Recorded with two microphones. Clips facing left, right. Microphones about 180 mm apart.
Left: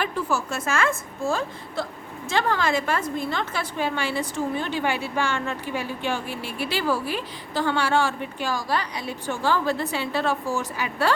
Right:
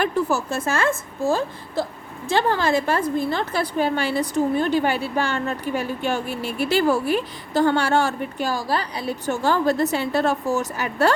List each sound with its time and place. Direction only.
0.0 s a woman's voice: 35° right (ahead or behind)